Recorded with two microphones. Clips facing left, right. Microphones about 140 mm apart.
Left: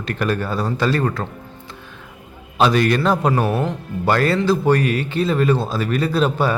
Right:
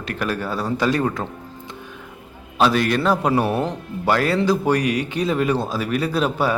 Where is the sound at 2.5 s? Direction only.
Centre (ahead or behind).